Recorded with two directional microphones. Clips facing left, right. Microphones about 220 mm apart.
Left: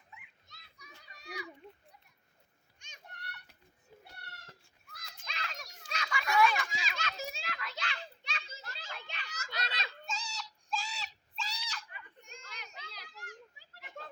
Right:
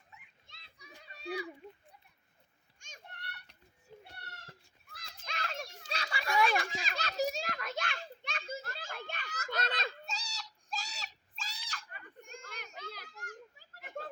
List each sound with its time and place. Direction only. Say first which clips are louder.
0.4 s children playing: right 1 dB; 30° right (ahead or behind)
2.7 s children playing: right 4 dB; 45° right (ahead or behind)
4.9 s children playing: right 1 dB; 30° right (ahead or behind)
5.2 s children playing: right 4 dB; 45° right (ahead or behind)
5.5 s children playing: right 3 dB; 30° right (ahead or behind); by 14.1 s 50° right (ahead or behind)